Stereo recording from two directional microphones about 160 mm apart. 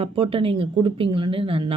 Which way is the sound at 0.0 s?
35° right (ahead or behind).